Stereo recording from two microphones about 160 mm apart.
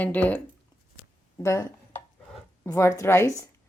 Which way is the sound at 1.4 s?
15° left (ahead or behind).